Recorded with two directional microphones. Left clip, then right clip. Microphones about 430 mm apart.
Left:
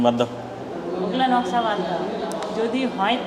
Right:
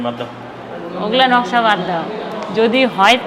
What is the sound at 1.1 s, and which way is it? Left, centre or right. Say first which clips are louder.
A woman's voice: right 8 dB; right.